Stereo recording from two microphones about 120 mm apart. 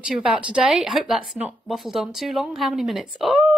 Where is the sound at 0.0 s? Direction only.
5° right (ahead or behind).